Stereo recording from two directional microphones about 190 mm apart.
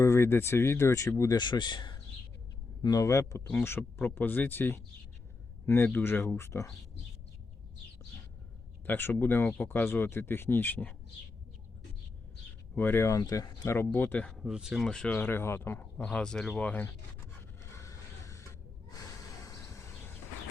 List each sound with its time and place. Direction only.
0.0 s speech: 15° left (ahead or behind)
8.9 s speech: 10° left (ahead or behind)
12.7 s speech: 10° left (ahead or behind)
17.7 s a sound: 15° left (ahead or behind)